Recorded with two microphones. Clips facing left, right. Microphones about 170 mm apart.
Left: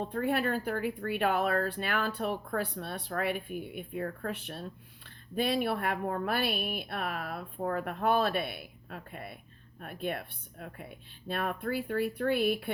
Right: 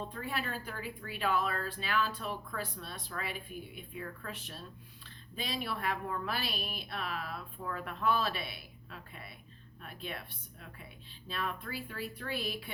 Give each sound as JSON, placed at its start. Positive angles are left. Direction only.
{"t": 0.0, "sound": "speech", "side_deg": 55}